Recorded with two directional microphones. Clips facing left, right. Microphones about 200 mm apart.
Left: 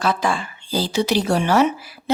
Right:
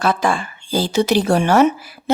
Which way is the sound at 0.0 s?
50° right (ahead or behind).